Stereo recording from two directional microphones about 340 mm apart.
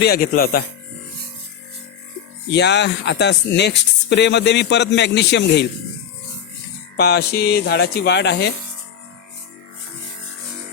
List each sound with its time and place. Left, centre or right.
0.0 s speech: left
2.5 s speech: left
6.9 s speech: left